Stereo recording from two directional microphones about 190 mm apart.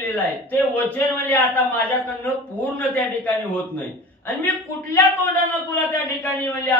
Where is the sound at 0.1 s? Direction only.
10° left (ahead or behind).